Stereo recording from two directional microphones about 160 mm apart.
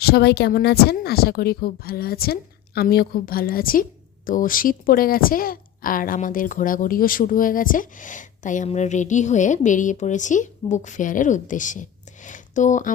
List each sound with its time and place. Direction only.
0.0 s a woman's voice: 90° left; by 12.9 s 50° left (ahead or behind)